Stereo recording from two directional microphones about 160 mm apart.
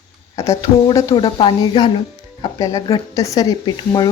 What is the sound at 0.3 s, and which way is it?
A woman's voice, 20° left (ahead or behind).